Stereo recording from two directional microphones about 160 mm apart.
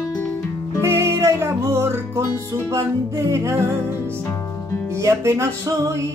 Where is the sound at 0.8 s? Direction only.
15° right (ahead or behind).